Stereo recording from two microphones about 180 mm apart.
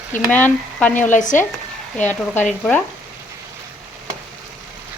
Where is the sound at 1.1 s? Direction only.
45° left (ahead or behind).